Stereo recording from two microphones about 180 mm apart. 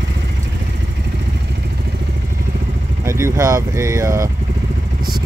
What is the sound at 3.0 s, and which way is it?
Speech, 15° right (ahead or behind).